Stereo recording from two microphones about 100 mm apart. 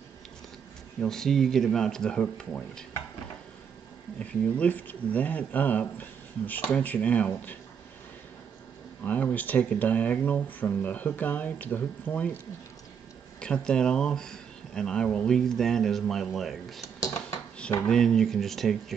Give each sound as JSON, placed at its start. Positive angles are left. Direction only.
{"t": 1.0, "sound": "speech", "side_deg": 5}
{"t": 4.2, "sound": "speech", "side_deg": 15}
{"t": 9.0, "sound": "speech", "side_deg": 15}
{"t": 13.4, "sound": "speech", "side_deg": 10}
{"t": 17.0, "sound": "a sound", "side_deg": 35}
{"t": 17.8, "sound": "speech", "side_deg": 5}